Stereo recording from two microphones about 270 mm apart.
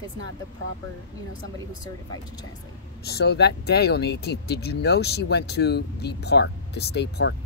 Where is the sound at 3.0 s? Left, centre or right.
Left.